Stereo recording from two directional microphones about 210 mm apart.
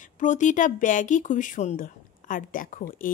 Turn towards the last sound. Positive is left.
turn(degrees=40)  # may be behind; listen again after turning